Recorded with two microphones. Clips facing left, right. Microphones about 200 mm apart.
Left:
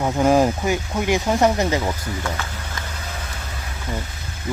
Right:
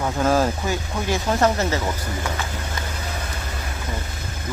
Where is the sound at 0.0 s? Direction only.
15° left (ahead or behind).